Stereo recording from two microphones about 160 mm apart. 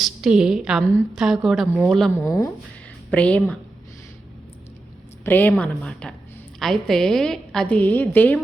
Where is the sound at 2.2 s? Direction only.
20° left (ahead or behind).